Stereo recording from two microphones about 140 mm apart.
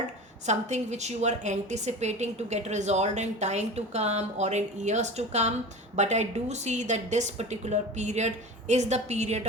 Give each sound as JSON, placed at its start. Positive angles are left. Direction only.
{"t": 0.4, "sound": "a woman's voice", "side_deg": -55}